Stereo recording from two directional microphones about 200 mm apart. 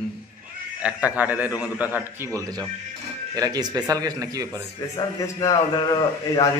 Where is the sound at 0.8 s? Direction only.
5° right (ahead or behind).